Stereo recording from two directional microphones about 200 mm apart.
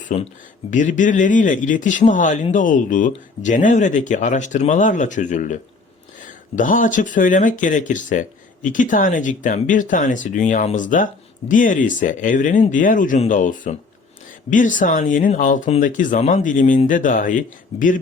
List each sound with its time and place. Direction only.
0.1 s speech: 35° left (ahead or behind)
6.6 s speech: 40° left (ahead or behind)